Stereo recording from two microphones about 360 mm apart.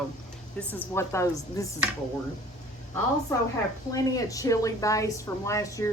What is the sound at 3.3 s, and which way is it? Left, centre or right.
A woman's voice, centre.